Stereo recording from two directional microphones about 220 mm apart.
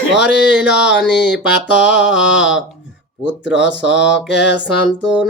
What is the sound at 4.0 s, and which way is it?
Mantra, 55° left (ahead or behind).